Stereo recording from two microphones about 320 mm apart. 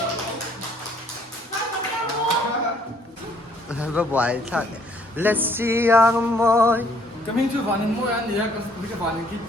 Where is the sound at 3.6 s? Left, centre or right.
Centre.